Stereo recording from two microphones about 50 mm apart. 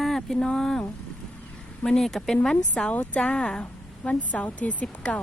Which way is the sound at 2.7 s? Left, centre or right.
Centre.